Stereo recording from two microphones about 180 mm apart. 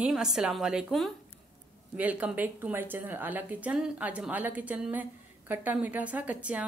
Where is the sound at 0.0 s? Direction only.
5° right (ahead or behind).